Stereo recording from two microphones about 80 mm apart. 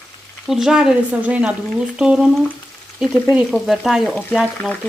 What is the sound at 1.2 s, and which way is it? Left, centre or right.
Speech, centre.